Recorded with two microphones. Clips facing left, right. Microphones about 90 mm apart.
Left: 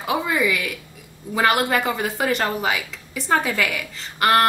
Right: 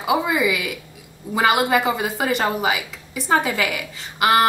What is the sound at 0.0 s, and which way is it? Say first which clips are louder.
Speech: right 2 dB; 5° right (ahead or behind).